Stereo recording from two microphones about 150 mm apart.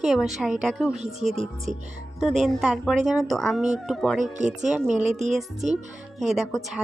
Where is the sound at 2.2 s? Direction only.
Centre (ahead or behind).